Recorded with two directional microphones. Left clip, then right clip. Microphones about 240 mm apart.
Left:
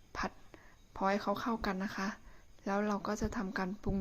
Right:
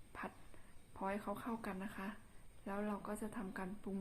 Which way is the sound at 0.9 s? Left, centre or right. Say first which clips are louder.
Left 10 dB; left.